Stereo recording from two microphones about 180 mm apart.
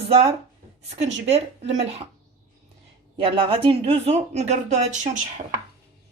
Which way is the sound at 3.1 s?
30° right (ahead or behind).